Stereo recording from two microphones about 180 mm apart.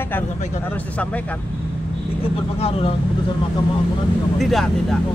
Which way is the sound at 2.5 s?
30° left (ahead or behind).